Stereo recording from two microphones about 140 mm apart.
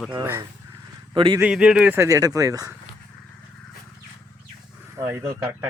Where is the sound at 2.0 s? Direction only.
25° right (ahead or behind).